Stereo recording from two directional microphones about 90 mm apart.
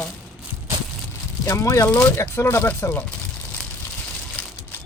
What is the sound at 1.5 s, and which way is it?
Speech, 35° left (ahead or behind).